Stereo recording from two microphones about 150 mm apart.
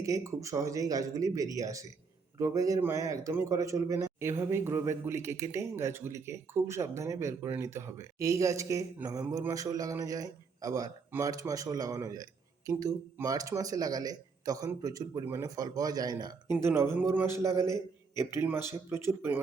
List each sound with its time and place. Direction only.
0.0 s a man's voice: 20° right (ahead or behind)